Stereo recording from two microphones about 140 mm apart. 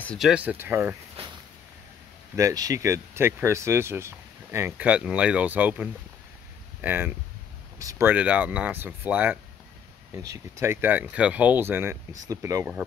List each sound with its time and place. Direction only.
0.2 s speech: 10° right (ahead or behind)
1.2 s a sound: 40° right (ahead or behind)
2.3 s speech: 25° right (ahead or behind)
10.1 s speech: 25° right (ahead or behind)